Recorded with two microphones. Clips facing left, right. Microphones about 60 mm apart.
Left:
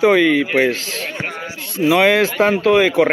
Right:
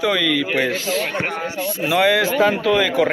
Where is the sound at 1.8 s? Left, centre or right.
Left.